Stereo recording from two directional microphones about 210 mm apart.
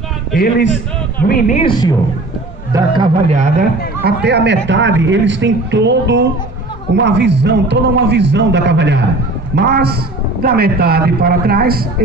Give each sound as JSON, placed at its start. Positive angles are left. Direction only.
{"t": 1.2, "sound": "speech", "side_deg": 45}
{"t": 1.6, "sound": "speech", "side_deg": 20}
{"t": 2.7, "sound": "a man's voice", "side_deg": -20}
{"t": 3.3, "sound": "a man's voice", "side_deg": -45}